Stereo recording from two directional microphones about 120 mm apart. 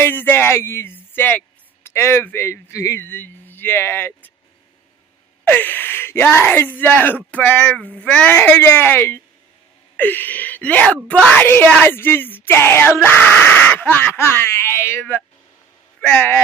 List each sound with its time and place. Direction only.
0.0 s speech: 15° left (ahead or behind)
5.4 s speech: 15° left (ahead or behind)